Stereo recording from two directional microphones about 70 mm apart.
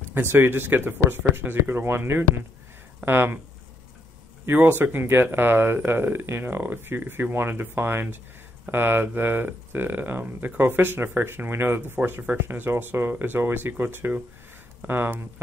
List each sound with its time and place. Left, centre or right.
0.1 s speech: right
4.5 s speech: right